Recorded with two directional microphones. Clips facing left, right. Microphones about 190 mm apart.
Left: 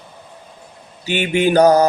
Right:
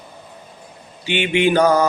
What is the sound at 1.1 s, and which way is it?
Mantra, 40° left (ahead or behind).